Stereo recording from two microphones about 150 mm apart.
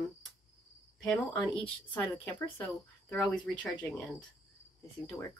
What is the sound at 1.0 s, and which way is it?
A woman's voice, 5° left (ahead or behind).